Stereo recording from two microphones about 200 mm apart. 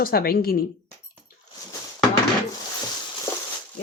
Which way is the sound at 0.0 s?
50° left (ahead or behind).